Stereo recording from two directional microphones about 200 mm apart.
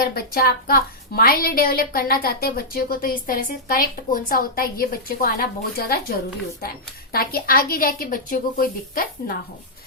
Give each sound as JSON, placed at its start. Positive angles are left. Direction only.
{"t": 0.0, "sound": "a woman's voice", "side_deg": 50}